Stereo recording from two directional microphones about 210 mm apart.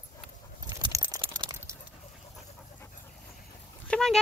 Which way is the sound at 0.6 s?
20° right (ahead or behind).